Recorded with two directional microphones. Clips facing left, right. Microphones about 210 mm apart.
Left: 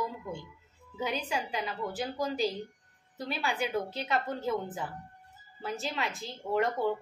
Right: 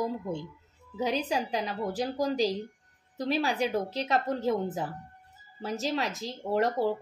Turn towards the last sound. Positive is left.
turn(degrees=-35)  # may be behind; listen again after turning